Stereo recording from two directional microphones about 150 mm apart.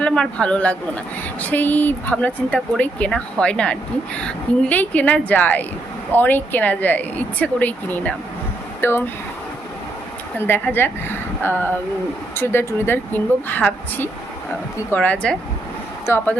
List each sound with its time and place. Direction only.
0.0 s speech: 5° left (ahead or behind)
10.3 s speech: 15° left (ahead or behind)